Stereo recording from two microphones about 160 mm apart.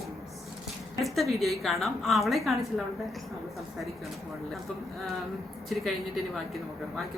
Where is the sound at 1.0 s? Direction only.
Centre (ahead or behind).